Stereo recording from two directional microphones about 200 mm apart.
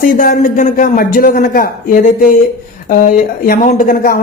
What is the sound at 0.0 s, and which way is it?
A man's voice, 45° left (ahead or behind).